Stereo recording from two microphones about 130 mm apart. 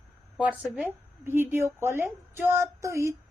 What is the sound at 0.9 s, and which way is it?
A woman's voice, 15° right (ahead or behind).